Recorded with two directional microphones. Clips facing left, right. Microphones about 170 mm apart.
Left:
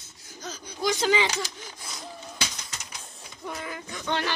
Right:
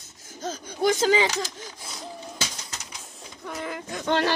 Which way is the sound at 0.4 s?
45° right (ahead or behind).